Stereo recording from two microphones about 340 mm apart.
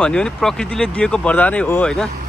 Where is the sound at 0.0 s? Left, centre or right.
Centre.